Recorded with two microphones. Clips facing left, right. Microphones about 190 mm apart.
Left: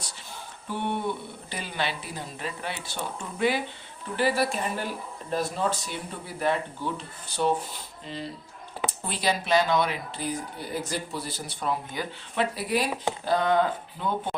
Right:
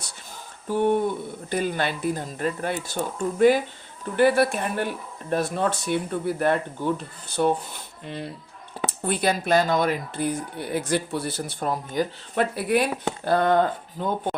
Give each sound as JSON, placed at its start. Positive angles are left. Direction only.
{"t": 0.7, "sound": "speech", "side_deg": -45}